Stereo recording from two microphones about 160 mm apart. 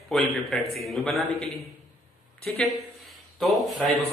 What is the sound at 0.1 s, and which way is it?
A man's voice, centre (ahead or behind).